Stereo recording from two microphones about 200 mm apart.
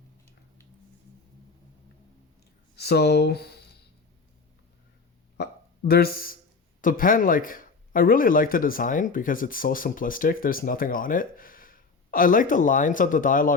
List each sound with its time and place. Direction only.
2.7 s speech: 55° left (ahead or behind)
5.4 s hiccup: 50° left (ahead or behind)
6.8 s speech: 45° left (ahead or behind)